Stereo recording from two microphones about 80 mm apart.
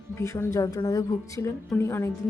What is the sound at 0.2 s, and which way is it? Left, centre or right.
Speech, left.